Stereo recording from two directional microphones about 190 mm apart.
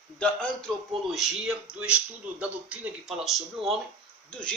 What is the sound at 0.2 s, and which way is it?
Speech, 5° left (ahead or behind).